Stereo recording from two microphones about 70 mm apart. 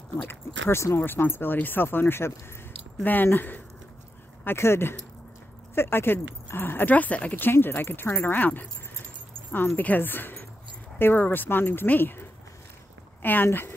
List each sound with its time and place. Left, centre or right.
0.3 s speech: left